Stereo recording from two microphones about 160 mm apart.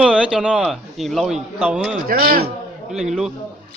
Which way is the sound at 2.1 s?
70° right (ahead or behind).